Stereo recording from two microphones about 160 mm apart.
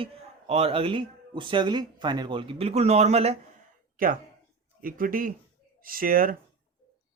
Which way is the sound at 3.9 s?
60° right (ahead or behind).